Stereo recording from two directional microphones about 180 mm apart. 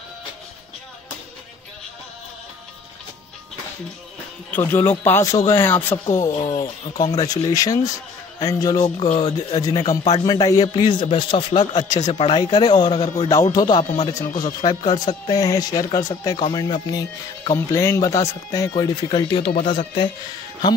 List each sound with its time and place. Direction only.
4.5 s a man's voice: 10° left (ahead or behind)
8.9 s speech: 30° left (ahead or behind)
9.8 s speech: 40° left (ahead or behind)
10.2 s a man's voice: 20° left (ahead or behind)